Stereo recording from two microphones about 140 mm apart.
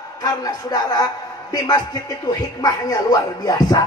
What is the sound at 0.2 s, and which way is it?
A woman's voice, 30° left (ahead or behind).